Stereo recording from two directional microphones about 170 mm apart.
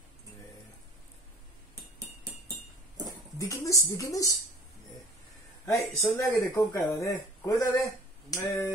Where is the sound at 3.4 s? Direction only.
20° left (ahead or behind).